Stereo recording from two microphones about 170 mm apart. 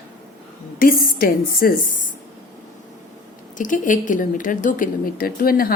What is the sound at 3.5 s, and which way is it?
A woman's voice, 50° left (ahead or behind).